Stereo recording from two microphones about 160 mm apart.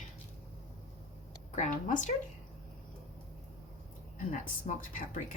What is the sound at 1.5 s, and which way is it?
Speech, 50° left (ahead or behind).